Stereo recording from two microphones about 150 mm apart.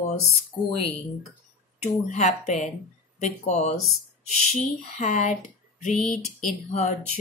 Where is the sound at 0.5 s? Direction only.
35° left (ahead or behind).